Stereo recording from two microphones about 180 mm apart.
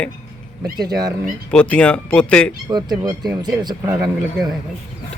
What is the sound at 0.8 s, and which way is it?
Speech, 20° right (ahead or behind).